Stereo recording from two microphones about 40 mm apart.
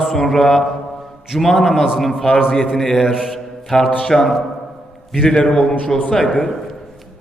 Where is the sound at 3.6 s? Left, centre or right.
Centre.